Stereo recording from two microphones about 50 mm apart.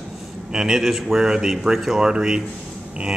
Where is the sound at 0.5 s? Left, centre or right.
Centre.